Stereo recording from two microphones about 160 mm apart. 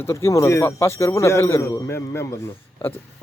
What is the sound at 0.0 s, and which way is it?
Speech, 15° left (ahead or behind).